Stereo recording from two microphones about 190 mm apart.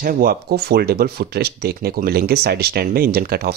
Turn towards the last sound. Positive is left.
turn(degrees=-55)  # may be behind; listen again after turning